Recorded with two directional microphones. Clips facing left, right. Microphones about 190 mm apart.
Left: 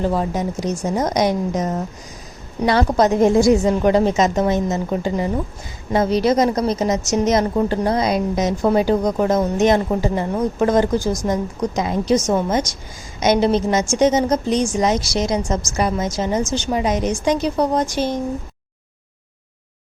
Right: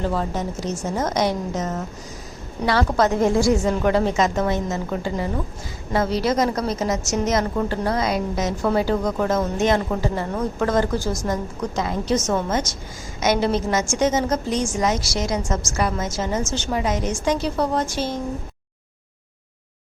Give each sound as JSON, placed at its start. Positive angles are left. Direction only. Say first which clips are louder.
{"t": 0.0, "sound": "a woman's voice", "louder": "left 4 dB", "side_deg": 15}